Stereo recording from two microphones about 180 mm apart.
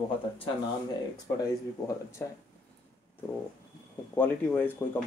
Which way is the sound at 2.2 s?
10° left (ahead or behind).